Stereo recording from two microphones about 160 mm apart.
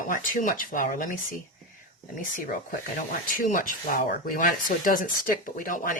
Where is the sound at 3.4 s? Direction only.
55° left (ahead or behind).